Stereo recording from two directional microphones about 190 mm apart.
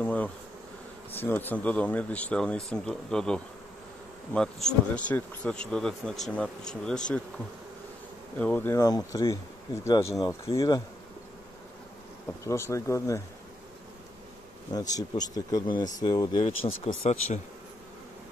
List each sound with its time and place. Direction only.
0.0 s bee: 10° left (ahead or behind)
1.1 s speech: 10° left (ahead or behind)
8.4 s speech: 10° left (ahead or behind)
12.4 s speech: 15° left (ahead or behind)
14.7 s speech: 20° left (ahead or behind)
16.4 s speech: 35° left (ahead or behind)